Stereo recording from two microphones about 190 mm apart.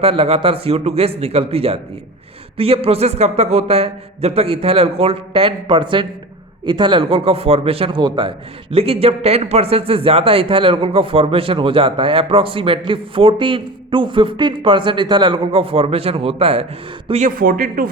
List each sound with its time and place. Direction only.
0.0 s a man's voice: 30° right (ahead or behind); by 17.8 s 50° right (ahead or behind)